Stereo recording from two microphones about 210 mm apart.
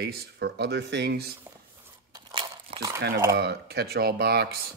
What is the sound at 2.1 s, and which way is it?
Crumpling, 20° right (ahead or behind).